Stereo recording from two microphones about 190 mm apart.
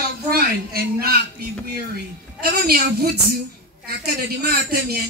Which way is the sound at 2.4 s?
55° right (ahead or behind).